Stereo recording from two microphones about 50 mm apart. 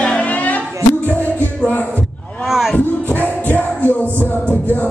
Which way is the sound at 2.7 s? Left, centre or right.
Left.